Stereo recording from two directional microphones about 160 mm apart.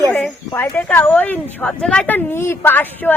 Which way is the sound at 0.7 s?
10° left (ahead or behind).